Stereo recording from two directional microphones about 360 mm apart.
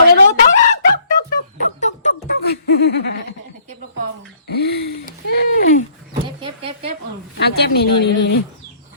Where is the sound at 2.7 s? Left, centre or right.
Left.